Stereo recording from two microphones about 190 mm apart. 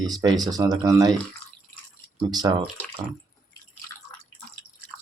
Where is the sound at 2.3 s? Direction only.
20° right (ahead or behind).